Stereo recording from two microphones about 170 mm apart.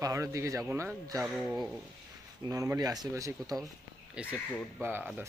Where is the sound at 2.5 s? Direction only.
20° right (ahead or behind).